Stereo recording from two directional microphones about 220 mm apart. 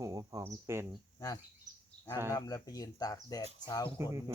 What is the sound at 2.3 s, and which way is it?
Speech, 15° left (ahead or behind).